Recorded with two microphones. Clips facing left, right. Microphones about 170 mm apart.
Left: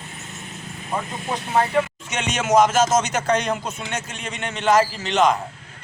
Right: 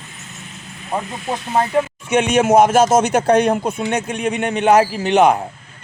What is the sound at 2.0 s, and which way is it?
A man's voice, 55° right (ahead or behind).